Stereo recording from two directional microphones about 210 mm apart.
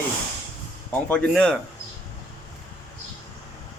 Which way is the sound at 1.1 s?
5° left (ahead or behind).